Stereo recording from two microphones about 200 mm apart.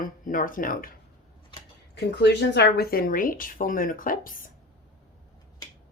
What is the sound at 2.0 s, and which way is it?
Speech, 55° left (ahead or behind).